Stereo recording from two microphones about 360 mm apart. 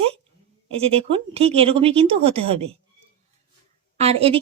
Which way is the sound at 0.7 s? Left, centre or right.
Centre.